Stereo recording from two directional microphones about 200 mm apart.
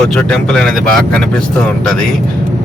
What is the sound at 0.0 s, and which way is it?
Speech, 5° left (ahead or behind).